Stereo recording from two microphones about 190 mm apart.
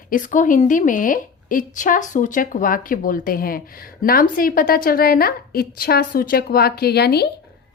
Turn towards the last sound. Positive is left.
turn(degrees=60)  # may be behind; listen again after turning